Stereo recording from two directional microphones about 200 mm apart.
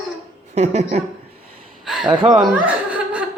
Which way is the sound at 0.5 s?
35° right (ahead or behind).